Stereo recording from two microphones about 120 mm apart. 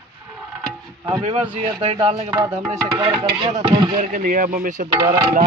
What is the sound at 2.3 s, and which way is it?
Music, 25° right (ahead or behind).